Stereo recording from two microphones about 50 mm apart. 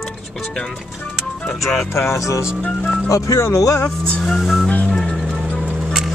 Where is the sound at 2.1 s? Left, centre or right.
Left.